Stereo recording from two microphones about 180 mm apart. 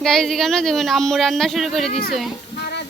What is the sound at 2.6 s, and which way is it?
Music, 70° left (ahead or behind).